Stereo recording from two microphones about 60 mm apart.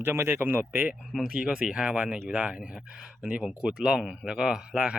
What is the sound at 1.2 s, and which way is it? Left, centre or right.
Speech, centre.